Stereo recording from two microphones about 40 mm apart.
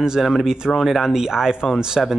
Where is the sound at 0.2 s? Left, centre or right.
Centre.